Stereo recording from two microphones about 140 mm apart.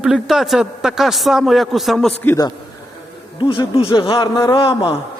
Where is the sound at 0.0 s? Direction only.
5° right (ahead or behind).